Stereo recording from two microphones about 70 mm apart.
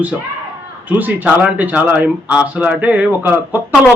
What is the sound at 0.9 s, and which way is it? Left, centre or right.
Speech, right.